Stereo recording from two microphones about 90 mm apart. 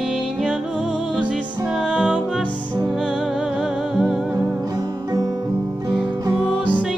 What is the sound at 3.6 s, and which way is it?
Music, 5° right (ahead or behind).